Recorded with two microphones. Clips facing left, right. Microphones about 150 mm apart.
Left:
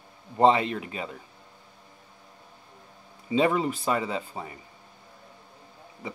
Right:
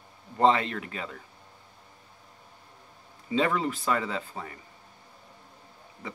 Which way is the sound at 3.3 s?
15° left (ahead or behind).